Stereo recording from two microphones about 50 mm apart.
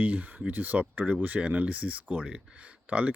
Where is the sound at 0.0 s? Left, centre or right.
Right.